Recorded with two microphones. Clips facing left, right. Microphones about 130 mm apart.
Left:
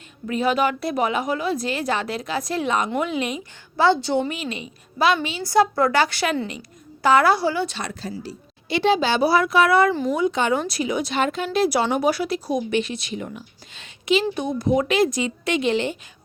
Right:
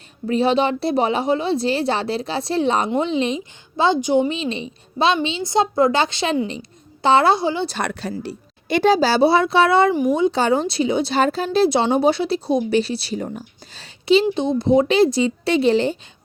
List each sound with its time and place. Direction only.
0.3 s a woman's voice: 30° right (ahead or behind)
7.8 s a woman's voice: 65° right (ahead or behind)
8.8 s speech: 40° right (ahead or behind)